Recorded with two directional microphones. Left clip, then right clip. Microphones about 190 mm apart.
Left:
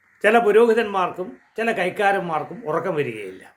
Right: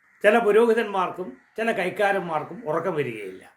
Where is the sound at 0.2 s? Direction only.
15° left (ahead or behind).